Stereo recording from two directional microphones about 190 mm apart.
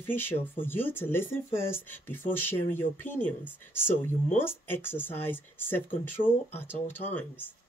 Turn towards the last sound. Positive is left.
turn(degrees=10)  # may be behind; listen again after turning